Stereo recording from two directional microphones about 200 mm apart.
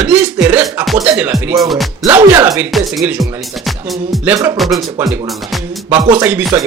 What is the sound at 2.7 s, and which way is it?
Speech, centre (ahead or behind).